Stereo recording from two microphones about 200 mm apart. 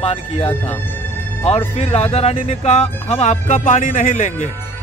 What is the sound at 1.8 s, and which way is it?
Speech, 30° left (ahead or behind).